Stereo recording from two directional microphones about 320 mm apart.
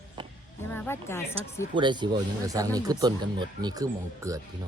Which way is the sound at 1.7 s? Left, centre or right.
Centre.